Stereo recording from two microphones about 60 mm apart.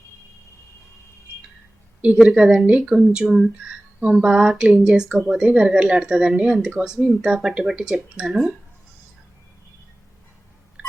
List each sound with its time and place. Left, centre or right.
2.0 s speech: right
2.9 s speech: centre
10.8 s telephone dialing: right